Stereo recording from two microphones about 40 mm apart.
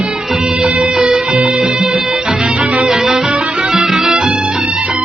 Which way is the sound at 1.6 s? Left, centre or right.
Centre.